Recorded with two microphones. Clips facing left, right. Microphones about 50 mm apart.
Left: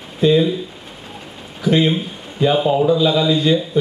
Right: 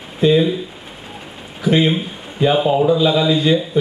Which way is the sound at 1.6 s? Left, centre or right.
Centre.